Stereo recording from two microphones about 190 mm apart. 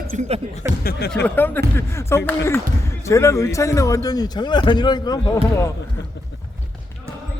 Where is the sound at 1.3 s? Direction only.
10° left (ahead or behind).